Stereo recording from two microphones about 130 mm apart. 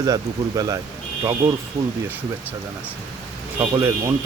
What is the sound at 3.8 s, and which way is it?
Speech, 25° right (ahead or behind).